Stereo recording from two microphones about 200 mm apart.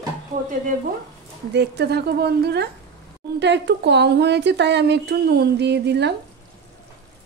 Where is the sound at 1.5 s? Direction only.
55° right (ahead or behind).